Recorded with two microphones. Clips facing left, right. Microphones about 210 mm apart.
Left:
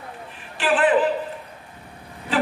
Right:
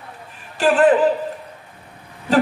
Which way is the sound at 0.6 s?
40° right (ahead or behind).